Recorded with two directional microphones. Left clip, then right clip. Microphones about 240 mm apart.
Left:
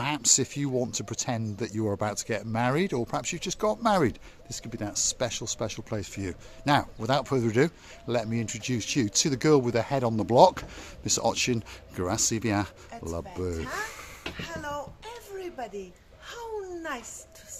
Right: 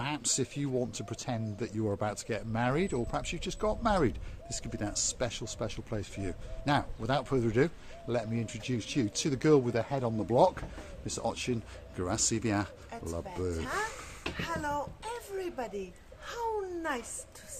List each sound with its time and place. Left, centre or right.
0.0 s speech: left
13.6 s speech: centre
13.9 s a sound: left
14.3 s speech: centre